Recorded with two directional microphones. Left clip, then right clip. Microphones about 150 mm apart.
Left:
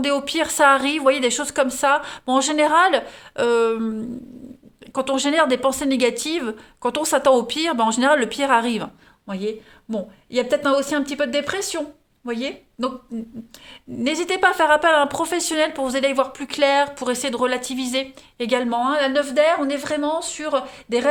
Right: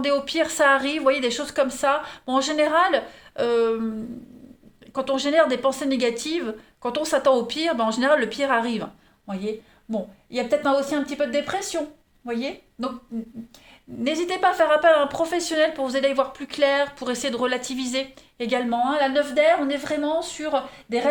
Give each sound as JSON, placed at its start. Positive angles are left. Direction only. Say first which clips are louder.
{"t": 0.0, "sound": "a woman's voice", "louder": "left 1 dB", "side_deg": 55}
{"t": 4.9, "sound": "speech", "louder": "left 1 dB", "side_deg": 55}
{"t": 14.0, "sound": "speech", "louder": "left 3 dB", "side_deg": 60}